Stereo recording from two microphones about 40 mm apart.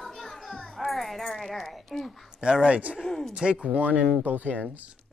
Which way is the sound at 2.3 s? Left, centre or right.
Right.